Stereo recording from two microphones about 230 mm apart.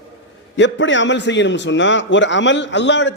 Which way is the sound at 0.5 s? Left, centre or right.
Left.